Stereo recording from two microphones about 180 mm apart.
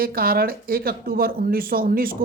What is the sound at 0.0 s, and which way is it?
Speech, 55° right (ahead or behind).